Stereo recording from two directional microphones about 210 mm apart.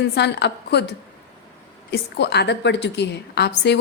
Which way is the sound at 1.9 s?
50° left (ahead or behind).